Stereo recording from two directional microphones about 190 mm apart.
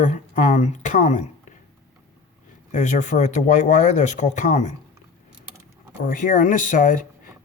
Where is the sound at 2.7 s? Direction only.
40° left (ahead or behind).